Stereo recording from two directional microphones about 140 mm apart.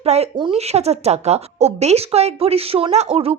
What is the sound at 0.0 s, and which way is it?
A woman's voice, 50° right (ahead or behind).